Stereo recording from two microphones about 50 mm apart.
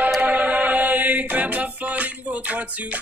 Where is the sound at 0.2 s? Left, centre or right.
Right.